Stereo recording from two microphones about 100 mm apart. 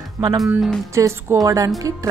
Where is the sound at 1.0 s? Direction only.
35° right (ahead or behind).